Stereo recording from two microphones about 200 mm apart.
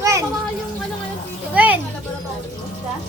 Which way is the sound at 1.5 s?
10° right (ahead or behind).